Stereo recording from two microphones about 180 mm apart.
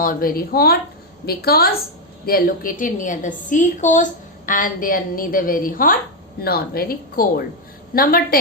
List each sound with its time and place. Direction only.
0.0 s a woman's voice: 50° left (ahead or behind)